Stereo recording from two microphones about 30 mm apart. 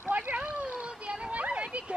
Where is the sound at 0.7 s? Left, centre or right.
Right.